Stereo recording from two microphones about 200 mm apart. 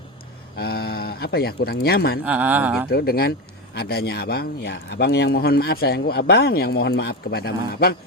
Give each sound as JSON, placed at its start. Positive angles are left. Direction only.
{"t": 0.5, "sound": "speech", "side_deg": 50}
{"t": 2.2, "sound": "speech", "side_deg": -5}
{"t": 2.9, "sound": "speech", "side_deg": 50}